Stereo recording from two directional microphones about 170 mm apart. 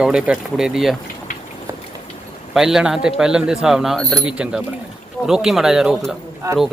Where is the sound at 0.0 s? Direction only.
5° right (ahead or behind).